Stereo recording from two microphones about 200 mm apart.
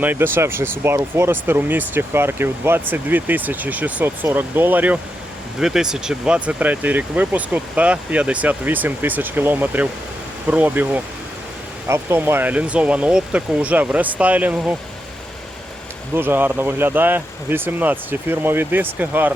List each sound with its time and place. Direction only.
0.0 s speech: 10° right (ahead or behind)
16.1 s speech: 10° right (ahead or behind)